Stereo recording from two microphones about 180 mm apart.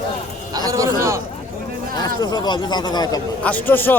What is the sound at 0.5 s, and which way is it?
Speech, 20° right (ahead or behind).